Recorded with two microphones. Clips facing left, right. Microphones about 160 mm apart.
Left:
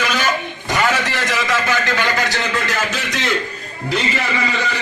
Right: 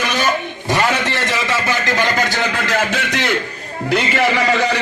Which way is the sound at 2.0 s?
55° right (ahead or behind).